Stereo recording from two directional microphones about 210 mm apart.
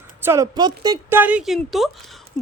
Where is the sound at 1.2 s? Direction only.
5° right (ahead or behind).